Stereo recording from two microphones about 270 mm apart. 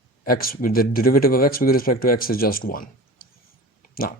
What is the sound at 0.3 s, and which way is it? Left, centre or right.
Speech, left.